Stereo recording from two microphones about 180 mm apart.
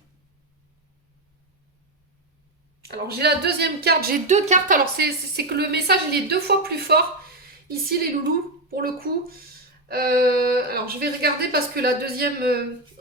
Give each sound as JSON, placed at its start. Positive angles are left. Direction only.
{"t": 2.8, "sound": "speech", "side_deg": -60}
{"t": 4.9, "sound": "speech", "side_deg": -60}